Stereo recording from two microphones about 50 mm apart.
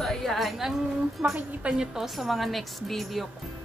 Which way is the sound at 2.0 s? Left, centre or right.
Centre.